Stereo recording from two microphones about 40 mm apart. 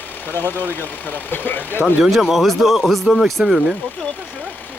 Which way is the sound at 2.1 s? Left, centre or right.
Centre.